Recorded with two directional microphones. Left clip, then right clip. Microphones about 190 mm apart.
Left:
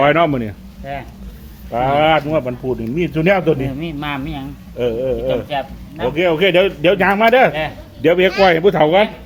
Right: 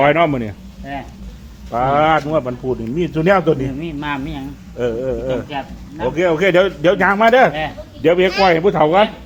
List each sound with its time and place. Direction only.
0.0 s speech: 10° left (ahead or behind)
1.7 s a man's voice: centre (ahead or behind)
3.8 s a man's voice: 35° left (ahead or behind)
4.8 s a man's voice: centre (ahead or behind)
8.0 s speech: 15° left (ahead or behind)